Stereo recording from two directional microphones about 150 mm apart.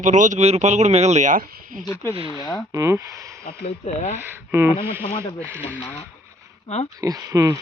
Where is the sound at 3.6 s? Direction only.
45° left (ahead or behind).